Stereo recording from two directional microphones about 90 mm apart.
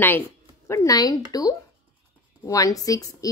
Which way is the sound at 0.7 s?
45° left (ahead or behind).